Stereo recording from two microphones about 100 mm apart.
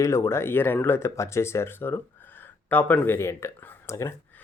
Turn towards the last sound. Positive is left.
turn(degrees=25)  # may be behind; listen again after turning